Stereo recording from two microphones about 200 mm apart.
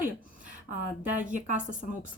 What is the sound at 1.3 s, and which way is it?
Speech, 40° right (ahead or behind).